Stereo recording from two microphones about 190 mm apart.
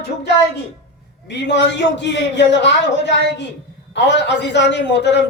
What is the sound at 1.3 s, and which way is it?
A man's voice, 65° left (ahead or behind).